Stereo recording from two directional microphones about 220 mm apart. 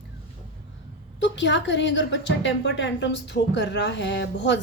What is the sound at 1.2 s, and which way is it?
A woman's voice, 55° left (ahead or behind).